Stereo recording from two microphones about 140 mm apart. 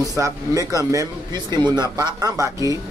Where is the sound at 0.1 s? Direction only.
25° right (ahead or behind).